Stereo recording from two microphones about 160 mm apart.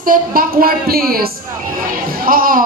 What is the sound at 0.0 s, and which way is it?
Speech, 60° right (ahead or behind).